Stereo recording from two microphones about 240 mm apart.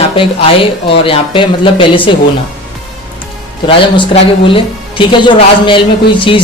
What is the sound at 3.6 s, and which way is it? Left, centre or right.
Speech, left.